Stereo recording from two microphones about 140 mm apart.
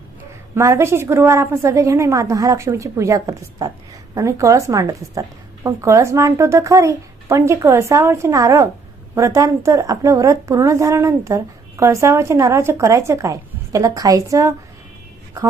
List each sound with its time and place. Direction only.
0.5 s speech: 20° right (ahead or behind)